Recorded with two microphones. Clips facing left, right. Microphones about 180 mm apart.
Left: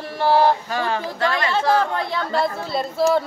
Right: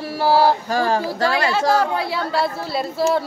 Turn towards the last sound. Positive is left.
turn(degrees=-5)  # may be behind; listen again after turning